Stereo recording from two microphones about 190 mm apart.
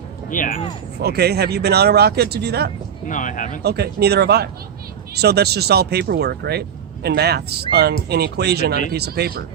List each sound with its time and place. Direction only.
0.3 s speech: 45° left (ahead or behind)
1.0 s speech: 60° right (ahead or behind)
3.1 s speech: 45° left (ahead or behind)
3.6 s speech: 60° right (ahead or behind)